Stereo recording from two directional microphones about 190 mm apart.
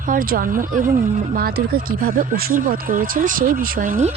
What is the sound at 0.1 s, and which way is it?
Speech, 50° right (ahead or behind).